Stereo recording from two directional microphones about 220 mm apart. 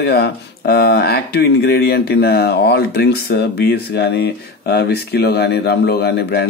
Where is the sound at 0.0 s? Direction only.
45° left (ahead or behind).